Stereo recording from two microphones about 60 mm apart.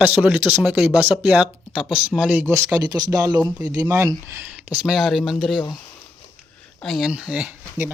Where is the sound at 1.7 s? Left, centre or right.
Centre.